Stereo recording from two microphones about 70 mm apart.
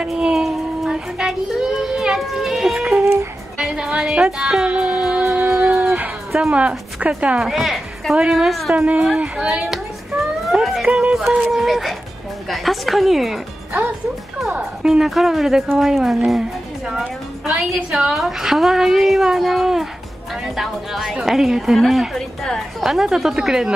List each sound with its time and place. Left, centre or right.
0.1 s a sound: centre
3.5 s music: centre
5.2 s a sound: right
6.5 s a woman's voice: centre
8.7 s a woman's voice: right
9.0 s music: centre
10.5 s a sound: centre
10.9 s music: centre
11.5 s a woman's voice: centre
14.6 s a woman's voice: centre
17.5 s a woman's voice: centre
22.8 s music: centre